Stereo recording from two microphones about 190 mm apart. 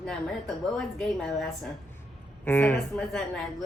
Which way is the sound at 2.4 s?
10° left (ahead or behind).